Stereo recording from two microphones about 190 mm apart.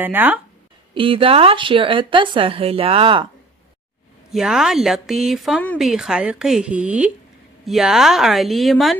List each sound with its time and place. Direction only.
0.0 s speech: 10° right (ahead or behind)
0.9 s speech: 30° right (ahead or behind)
4.3 s speech: centre (ahead or behind)